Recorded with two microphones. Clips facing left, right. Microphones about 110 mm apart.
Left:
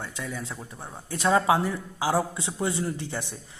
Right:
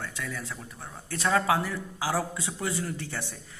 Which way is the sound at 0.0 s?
20° left (ahead or behind).